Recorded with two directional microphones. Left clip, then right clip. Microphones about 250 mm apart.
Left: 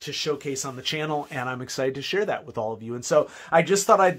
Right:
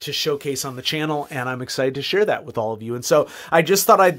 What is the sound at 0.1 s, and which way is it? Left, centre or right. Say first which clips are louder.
Speech: right 5 dB; right.